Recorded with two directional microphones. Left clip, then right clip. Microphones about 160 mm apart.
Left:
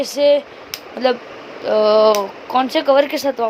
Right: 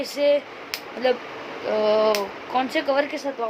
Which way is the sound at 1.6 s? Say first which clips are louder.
Left 7 dB; 45° left (ahead or behind).